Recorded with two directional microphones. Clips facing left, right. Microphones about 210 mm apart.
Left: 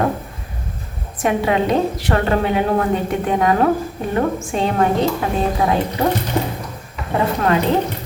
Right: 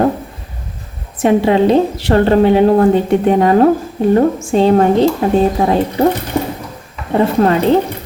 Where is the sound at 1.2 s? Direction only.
30° right (ahead or behind).